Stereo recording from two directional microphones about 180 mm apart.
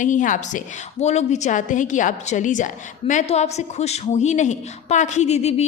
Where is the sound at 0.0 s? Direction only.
45° left (ahead or behind).